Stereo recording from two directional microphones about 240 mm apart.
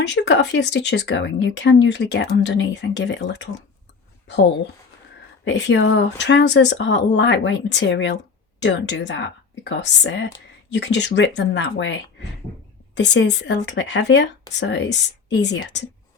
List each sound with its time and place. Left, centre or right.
0.0 s speech: left
5.5 s speech: left